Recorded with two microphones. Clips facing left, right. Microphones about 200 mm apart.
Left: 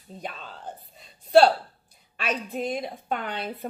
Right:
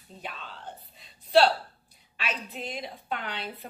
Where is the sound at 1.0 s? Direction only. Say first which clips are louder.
Left 4 dB; 50° left (ahead or behind).